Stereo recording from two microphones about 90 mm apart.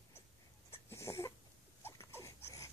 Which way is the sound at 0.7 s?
30° left (ahead or behind).